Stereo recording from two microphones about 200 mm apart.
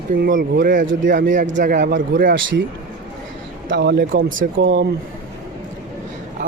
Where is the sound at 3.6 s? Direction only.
60° right (ahead or behind).